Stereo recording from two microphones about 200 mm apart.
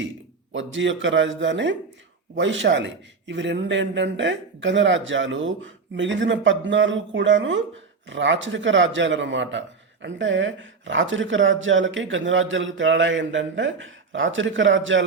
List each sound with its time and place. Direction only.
0.5 s speech: 70° right (ahead or behind)